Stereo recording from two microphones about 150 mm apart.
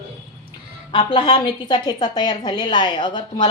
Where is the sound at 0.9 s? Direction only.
35° left (ahead or behind).